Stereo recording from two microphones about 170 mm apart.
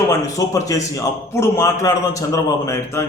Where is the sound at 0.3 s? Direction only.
20° left (ahead or behind).